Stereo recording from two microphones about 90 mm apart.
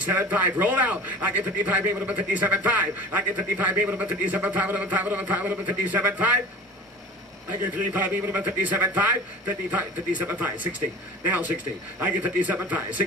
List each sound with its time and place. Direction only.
0.0 s a man's voice: 20° right (ahead or behind)
7.4 s a man's voice: 20° right (ahead or behind)